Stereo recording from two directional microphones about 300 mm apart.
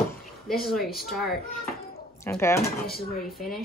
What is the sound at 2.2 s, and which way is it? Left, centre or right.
Speech, centre.